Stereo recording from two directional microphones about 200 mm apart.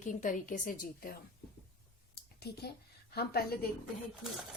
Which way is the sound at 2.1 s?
55° left (ahead or behind).